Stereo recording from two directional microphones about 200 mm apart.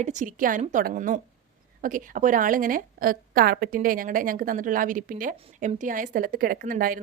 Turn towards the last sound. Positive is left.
turn(degrees=-45)  # may be behind; listen again after turning